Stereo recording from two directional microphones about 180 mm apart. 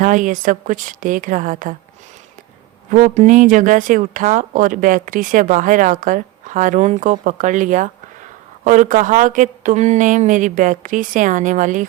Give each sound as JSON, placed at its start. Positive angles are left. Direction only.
{"t": 0.0, "sound": "speech", "side_deg": -45}
{"t": 2.9, "sound": "speech", "side_deg": -45}